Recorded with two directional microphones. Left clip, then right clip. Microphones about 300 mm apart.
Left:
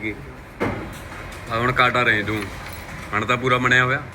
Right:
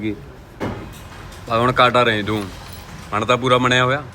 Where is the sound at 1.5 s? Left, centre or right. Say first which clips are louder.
Right 4 dB; right.